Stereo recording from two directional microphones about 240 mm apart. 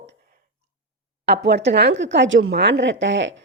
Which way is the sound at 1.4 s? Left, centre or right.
Right.